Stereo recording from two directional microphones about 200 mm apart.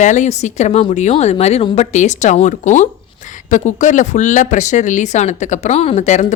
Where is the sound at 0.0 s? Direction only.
35° left (ahead or behind).